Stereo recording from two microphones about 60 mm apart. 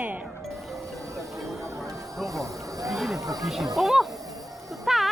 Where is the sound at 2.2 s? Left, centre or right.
Right.